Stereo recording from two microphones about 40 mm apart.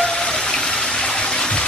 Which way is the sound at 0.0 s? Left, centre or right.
Centre.